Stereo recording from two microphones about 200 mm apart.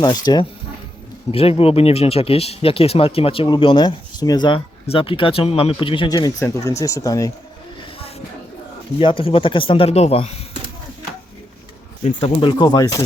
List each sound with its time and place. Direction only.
0.0 s speech: 20° left (ahead or behind)
7.8 s vehicle: 30° left (ahead or behind)
9.0 s speech: 25° left (ahead or behind)
12.0 s speech: 30° left (ahead or behind)